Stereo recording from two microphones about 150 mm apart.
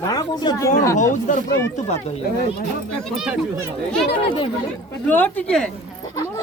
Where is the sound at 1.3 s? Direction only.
50° left (ahead or behind).